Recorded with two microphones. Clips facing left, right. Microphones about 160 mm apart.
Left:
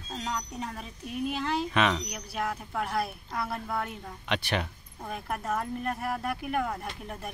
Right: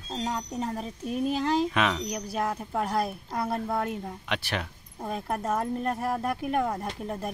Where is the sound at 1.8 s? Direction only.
5° right (ahead or behind).